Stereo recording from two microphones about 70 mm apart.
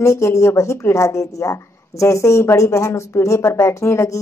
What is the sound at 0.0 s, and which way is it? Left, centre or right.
A woman's voice, left.